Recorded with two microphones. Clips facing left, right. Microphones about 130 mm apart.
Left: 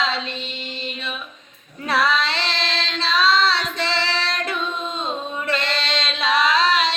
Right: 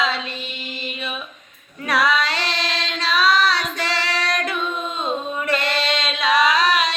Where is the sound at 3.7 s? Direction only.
25° left (ahead or behind).